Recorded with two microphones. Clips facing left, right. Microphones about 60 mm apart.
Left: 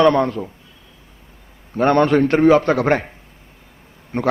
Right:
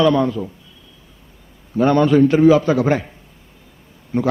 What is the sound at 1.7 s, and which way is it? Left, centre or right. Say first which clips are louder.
Speech: right 1 dB; left.